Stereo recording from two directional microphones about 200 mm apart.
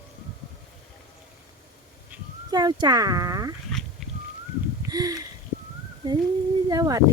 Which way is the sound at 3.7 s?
5° left (ahead or behind).